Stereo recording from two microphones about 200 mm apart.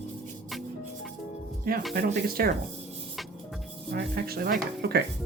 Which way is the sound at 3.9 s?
50° right (ahead or behind).